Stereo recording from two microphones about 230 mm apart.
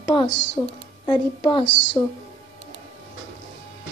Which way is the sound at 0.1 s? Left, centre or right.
Centre.